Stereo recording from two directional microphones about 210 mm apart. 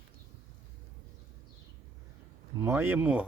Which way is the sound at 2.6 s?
10° right (ahead or behind).